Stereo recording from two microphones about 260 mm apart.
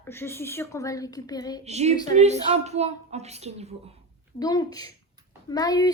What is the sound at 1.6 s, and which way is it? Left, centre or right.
A woman's voice, right.